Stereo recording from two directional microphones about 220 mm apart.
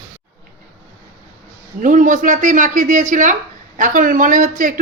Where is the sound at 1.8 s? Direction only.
35° right (ahead or behind).